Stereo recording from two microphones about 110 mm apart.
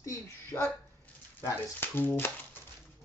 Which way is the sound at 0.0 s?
25° left (ahead or behind).